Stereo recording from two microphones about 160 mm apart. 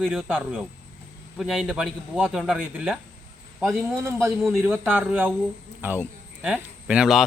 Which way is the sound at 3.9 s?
15° right (ahead or behind).